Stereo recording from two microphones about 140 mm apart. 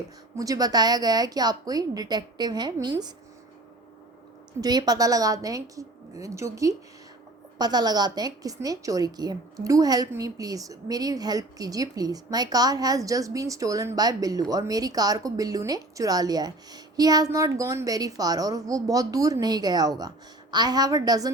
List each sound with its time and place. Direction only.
0.3 s speech: 25° right (ahead or behind)
4.6 s speech: 30° right (ahead or behind)